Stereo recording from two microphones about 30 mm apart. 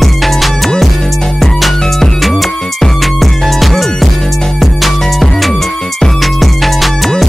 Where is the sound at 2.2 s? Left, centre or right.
Centre.